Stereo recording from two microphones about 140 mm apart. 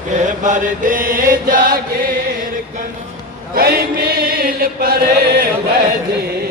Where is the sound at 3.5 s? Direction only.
90° right.